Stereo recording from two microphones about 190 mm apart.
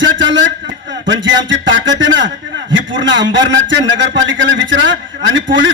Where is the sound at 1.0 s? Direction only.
70° right (ahead or behind).